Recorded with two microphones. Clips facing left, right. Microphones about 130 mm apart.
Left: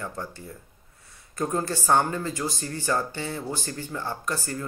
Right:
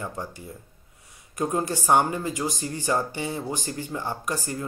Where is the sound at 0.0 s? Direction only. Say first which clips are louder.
Right 1 dB; 15° right (ahead or behind).